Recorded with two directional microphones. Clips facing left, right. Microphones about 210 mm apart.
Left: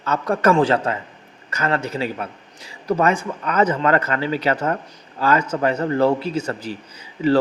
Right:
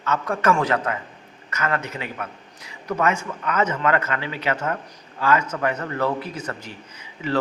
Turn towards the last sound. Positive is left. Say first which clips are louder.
# left 8 dB
turn(degrees=35)  # may be behind; listen again after turning